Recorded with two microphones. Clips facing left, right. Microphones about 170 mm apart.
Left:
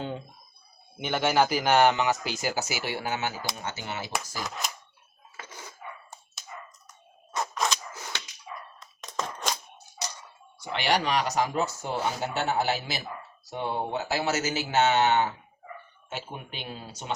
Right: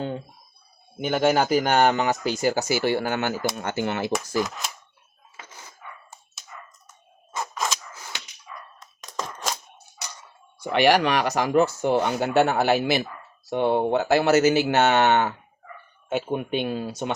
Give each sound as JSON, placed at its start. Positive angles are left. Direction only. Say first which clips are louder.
{"t": 0.9, "sound": "a man's voice", "louder": "right 4 dB", "side_deg": -45}
{"t": 8.8, "sound": "a sound", "louder": "right 1 dB", "side_deg": 0}
{"t": 10.6, "sound": "speech", "louder": "right 8 dB", "side_deg": -60}